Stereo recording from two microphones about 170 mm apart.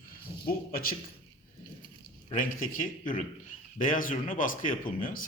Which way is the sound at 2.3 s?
50° left (ahead or behind).